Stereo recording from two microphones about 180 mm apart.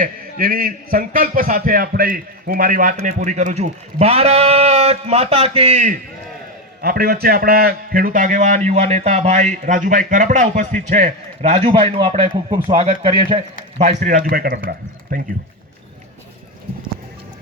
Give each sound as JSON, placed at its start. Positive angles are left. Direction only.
{"t": 0.0, "sound": "a man's voice", "side_deg": -55}
{"t": 6.8, "sound": "a man's voice", "side_deg": -55}
{"t": 13.7, "sound": "a man's voice", "side_deg": -40}